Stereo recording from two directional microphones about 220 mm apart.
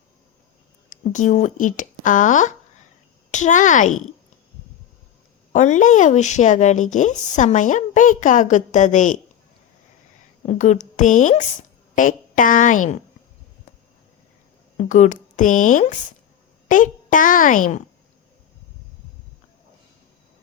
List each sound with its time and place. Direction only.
0.9 s a woman's voice: 35° left (ahead or behind)
5.5 s a woman's voice: 35° left (ahead or behind)
10.4 s a woman's voice: 30° left (ahead or behind)
14.8 s a woman's voice: 35° left (ahead or behind)